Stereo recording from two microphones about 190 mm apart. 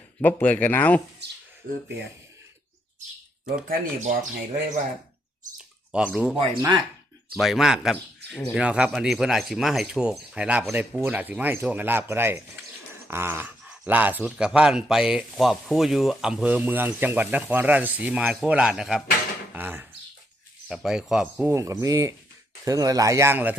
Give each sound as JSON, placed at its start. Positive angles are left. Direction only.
{"t": 0.2, "sound": "speech", "side_deg": 10}
{"t": 3.4, "sound": "speech", "side_deg": -50}
{"t": 5.9, "sound": "speech", "side_deg": -5}
{"t": 6.6, "sound": "speech", "side_deg": -20}
{"t": 7.3, "sound": "speech", "side_deg": 0}
{"t": 21.5, "sound": "speech", "side_deg": -15}